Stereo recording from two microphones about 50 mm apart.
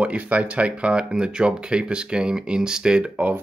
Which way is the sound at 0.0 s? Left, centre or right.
Right.